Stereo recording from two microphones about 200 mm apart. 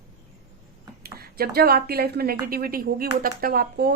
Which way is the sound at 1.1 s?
50° right (ahead or behind).